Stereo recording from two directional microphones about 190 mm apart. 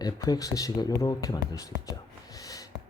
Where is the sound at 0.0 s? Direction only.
20° left (ahead or behind).